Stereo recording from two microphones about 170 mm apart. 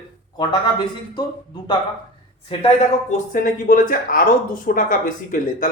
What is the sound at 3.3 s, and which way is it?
Speech, 55° left (ahead or behind).